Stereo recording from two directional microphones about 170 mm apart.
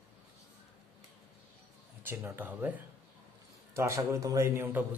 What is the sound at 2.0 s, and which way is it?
A man's voice, 10° right (ahead or behind).